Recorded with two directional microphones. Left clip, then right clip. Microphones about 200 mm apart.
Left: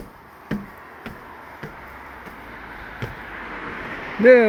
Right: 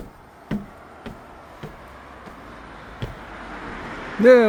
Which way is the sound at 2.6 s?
55° right (ahead or behind).